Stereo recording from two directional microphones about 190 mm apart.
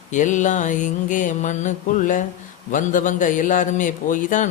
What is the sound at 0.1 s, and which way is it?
Speech, 40° left (ahead or behind).